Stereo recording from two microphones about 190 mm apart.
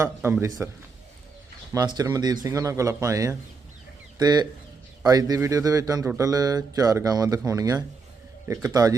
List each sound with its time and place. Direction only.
0.0 s a man's voice: 10° right (ahead or behind)
1.7 s a man's voice: 20° right (ahead or behind)